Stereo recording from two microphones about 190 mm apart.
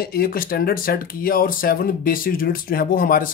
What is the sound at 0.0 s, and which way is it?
A man's voice, 50° left (ahead or behind).